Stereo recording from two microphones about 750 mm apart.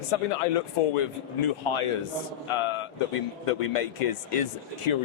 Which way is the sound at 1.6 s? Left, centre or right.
Left.